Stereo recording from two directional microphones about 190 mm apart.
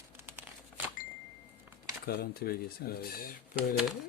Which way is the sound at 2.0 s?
55° left (ahead or behind).